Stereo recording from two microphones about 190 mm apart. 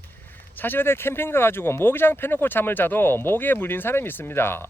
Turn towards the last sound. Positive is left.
turn(degrees=10)  # may be behind; listen again after turning